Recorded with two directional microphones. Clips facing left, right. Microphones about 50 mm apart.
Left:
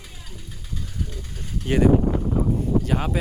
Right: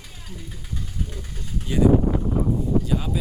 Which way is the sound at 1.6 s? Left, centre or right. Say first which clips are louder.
Even; left.